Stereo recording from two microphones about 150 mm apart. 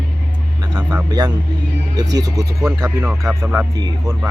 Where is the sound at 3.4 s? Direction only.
20° right (ahead or behind).